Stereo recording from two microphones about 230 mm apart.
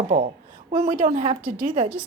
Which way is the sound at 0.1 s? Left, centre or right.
Right.